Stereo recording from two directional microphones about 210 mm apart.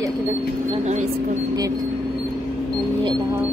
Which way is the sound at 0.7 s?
35° right (ahead or behind).